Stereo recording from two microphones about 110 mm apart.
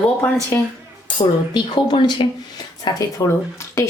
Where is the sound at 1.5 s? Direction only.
45° left (ahead or behind).